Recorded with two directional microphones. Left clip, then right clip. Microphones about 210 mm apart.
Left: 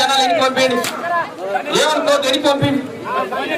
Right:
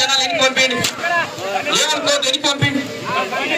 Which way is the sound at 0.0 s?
40° left (ahead or behind).